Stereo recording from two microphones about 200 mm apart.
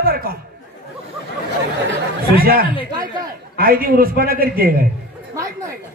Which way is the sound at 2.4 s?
50° right (ahead or behind).